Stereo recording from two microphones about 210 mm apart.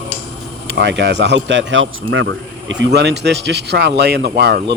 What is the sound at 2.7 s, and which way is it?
A man's voice, 55° right (ahead or behind).